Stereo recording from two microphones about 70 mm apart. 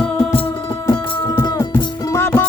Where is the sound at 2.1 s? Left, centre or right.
Left.